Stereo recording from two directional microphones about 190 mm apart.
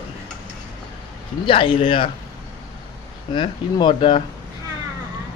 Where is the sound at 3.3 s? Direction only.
25° left (ahead or behind).